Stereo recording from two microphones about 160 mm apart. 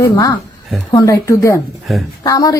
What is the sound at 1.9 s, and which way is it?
Speech, centre (ahead or behind).